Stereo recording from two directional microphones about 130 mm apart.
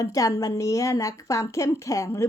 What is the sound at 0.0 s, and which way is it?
A woman's voice, 25° left (ahead or behind).